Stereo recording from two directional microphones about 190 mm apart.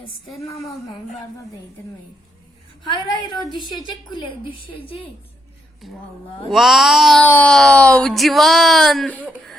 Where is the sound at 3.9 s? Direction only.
25° left (ahead or behind).